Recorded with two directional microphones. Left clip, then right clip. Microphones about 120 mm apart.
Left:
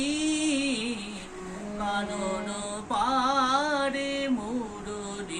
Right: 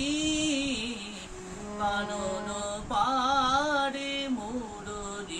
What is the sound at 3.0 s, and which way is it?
Mantra, 15° right (ahead or behind).